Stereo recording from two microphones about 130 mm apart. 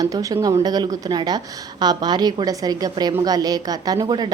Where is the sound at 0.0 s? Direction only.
25° right (ahead or behind).